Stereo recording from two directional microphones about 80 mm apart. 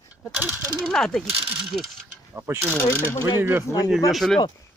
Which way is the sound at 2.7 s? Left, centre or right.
Left.